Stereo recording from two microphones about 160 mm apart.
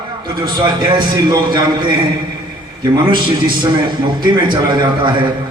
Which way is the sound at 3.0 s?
30° right (ahead or behind).